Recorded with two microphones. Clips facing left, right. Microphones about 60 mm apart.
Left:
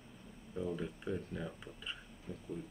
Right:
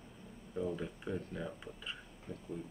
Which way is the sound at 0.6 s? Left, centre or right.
Centre.